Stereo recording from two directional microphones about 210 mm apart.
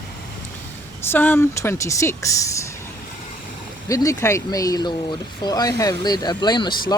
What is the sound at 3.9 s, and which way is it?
A woman's voice, 15° left (ahead or behind).